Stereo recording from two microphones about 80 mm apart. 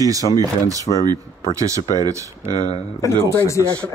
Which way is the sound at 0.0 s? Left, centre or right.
Right.